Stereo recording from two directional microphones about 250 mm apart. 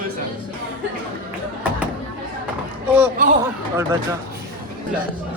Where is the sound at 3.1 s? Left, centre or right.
Right.